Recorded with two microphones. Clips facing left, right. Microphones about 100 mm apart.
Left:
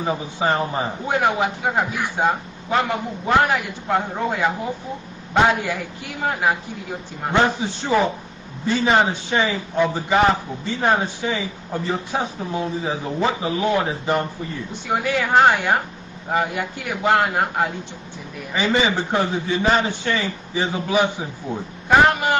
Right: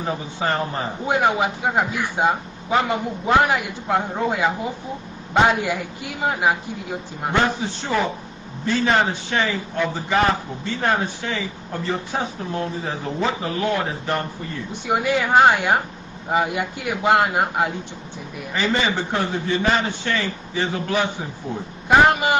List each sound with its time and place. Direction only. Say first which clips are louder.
0.0 s speech: left 2 dB; 10° left (ahead or behind)
1.0 s a man's voice: right 1 dB; 15° right (ahead or behind)
2.9 s a man's voice: right 1 dB; 15° right (ahead or behind)
3.9 s a man's voice: even; 5° right (ahead or behind)
7.4 s speech: left 2 dB; 5° left (ahead or behind)
14.7 s a man's voice: right 2 dB; 15° right (ahead or behind)
18.5 s speech: left 2 dB; 10° left (ahead or behind)
21.8 s a man's voice: even; 15° right (ahead or behind)